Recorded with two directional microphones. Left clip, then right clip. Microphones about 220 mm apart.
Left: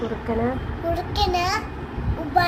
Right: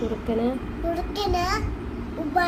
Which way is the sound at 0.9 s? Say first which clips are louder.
Left 3 dB; 15° right (ahead or behind).